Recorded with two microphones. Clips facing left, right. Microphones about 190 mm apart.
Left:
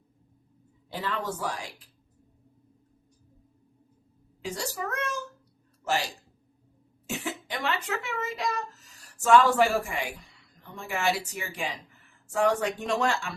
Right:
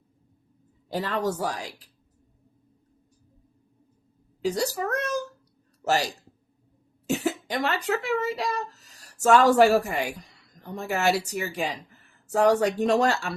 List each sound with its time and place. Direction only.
0.9 s a woman's voice: 40° right (ahead or behind)
4.4 s a woman's voice: 40° right (ahead or behind)
7.1 s speech: 40° right (ahead or behind)